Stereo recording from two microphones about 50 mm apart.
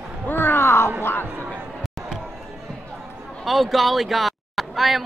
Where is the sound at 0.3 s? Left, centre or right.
Left.